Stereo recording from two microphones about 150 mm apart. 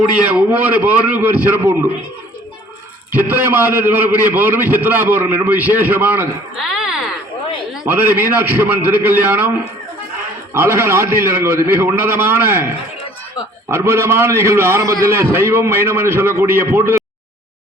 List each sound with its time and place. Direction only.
0.3 s a man's voice: 10° right (ahead or behind)
3.1 s a man's voice: 15° right (ahead or behind)
6.6 s a sound: 5° right (ahead or behind)
7.9 s a man's voice: 15° right (ahead or behind)
10.5 s a man's voice: 15° right (ahead or behind)